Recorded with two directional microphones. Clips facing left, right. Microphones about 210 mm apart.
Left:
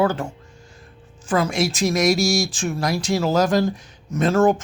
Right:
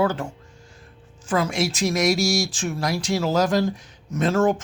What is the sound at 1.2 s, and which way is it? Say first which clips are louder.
Speech: left 2 dB; 45° left (ahead or behind).